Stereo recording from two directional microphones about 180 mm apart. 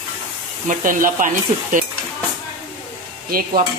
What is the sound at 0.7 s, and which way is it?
Speech, 50° right (ahead or behind).